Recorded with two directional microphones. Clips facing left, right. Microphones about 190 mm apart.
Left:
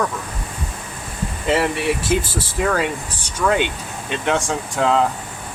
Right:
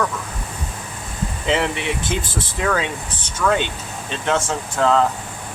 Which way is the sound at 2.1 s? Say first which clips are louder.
Left 4 dB; 10° left (ahead or behind).